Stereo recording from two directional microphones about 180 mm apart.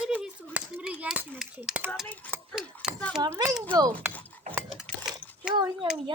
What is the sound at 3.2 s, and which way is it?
Speech, 15° right (ahead or behind).